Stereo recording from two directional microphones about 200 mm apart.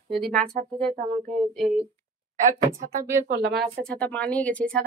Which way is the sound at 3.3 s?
55° right (ahead or behind).